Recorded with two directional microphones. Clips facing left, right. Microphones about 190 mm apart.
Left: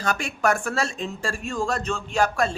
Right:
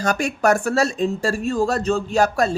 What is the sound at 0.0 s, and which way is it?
Speech, 40° right (ahead or behind).